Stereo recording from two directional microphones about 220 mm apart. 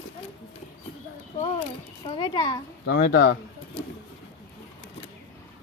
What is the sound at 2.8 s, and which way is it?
Speech, 45° left (ahead or behind).